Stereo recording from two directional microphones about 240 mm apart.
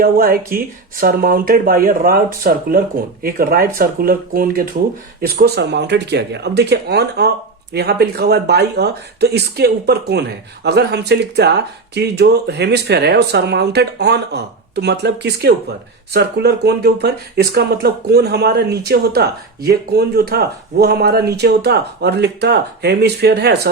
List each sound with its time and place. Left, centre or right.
0.0 s speech: right